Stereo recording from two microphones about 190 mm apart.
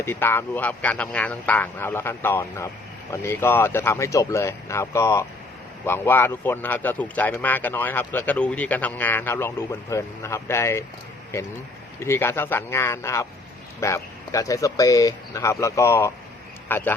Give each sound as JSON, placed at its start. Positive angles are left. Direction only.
{"t": 0.0, "sound": "speech", "side_deg": 10}